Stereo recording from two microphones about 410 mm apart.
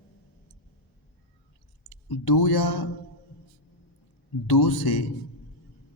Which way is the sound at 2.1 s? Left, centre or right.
Left.